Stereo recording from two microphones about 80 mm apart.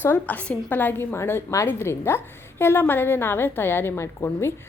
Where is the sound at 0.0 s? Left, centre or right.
Left.